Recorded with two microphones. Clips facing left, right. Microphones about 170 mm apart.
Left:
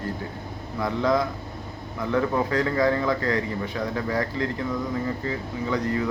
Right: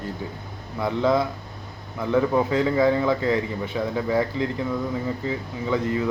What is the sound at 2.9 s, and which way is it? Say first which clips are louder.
Speech: right 3 dB; 20° right (ahead or behind).